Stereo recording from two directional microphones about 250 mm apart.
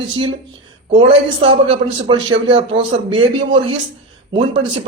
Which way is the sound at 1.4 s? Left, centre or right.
Centre.